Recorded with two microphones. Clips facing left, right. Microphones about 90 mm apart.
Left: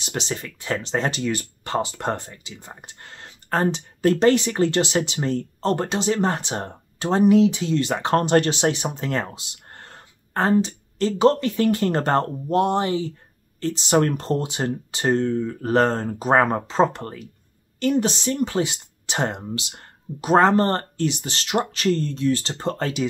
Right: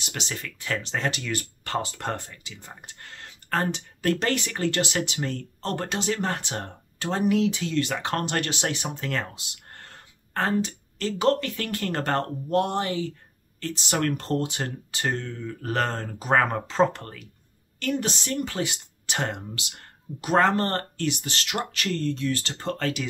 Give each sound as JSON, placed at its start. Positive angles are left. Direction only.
{"t": 0.0, "sound": "speech", "side_deg": 25}